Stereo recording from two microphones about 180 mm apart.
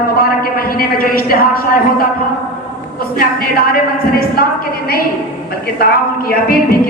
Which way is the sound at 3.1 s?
55° left (ahead or behind).